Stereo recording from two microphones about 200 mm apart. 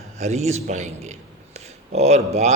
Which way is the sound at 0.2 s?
35° right (ahead or behind).